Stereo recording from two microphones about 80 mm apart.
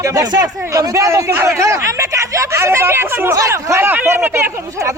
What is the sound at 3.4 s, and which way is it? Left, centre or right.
Speech, right.